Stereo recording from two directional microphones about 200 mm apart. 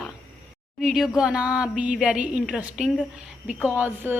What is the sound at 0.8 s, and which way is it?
A woman's voice, centre (ahead or behind).